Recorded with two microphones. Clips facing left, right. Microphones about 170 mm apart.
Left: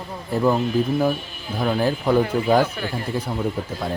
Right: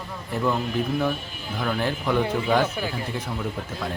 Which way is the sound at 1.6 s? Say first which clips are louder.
Left 5 dB; 35° left (ahead or behind).